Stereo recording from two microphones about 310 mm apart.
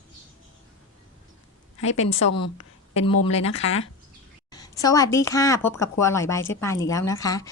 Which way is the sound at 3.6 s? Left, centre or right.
Left.